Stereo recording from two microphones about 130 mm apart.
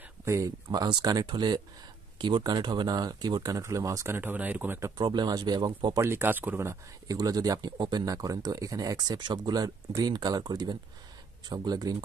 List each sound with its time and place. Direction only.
0.2 s speech: 25° right (ahead or behind)
5.9 s speech: 20° right (ahead or behind)